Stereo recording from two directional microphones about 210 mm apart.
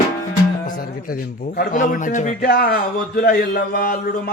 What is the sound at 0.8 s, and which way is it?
A man's voice, 45° left (ahead or behind).